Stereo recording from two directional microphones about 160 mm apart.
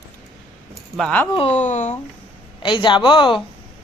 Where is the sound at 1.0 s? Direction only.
5° left (ahead or behind).